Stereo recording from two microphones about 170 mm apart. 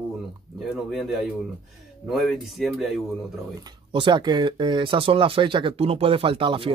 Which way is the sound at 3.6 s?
30° right (ahead or behind).